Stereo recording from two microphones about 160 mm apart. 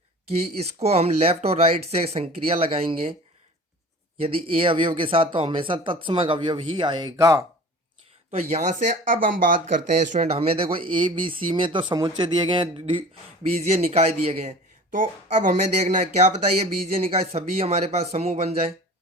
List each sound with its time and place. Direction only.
0.3 s speech: 40° right (ahead or behind)
4.2 s speech: 35° right (ahead or behind)
8.3 s speech: 45° right (ahead or behind)
10.3 s speech: 35° right (ahead or behind)